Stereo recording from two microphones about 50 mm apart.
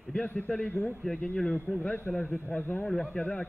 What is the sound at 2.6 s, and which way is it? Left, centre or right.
Speech, left.